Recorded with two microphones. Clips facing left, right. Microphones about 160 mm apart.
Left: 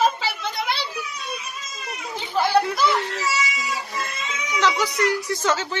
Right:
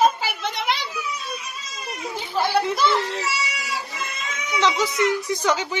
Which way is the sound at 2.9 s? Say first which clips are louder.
Even; 30° right (ahead or behind).